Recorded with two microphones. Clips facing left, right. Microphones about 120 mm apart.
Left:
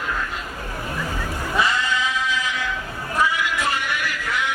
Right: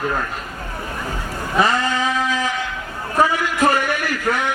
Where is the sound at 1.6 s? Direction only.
45° right (ahead or behind).